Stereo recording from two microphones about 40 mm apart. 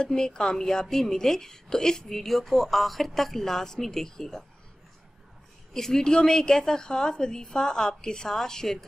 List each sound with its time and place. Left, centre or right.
0.0 s a woman's voice: centre
5.7 s a woman's voice: centre